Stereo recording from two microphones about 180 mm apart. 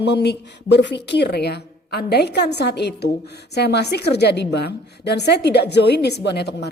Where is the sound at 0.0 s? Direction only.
70° left (ahead or behind).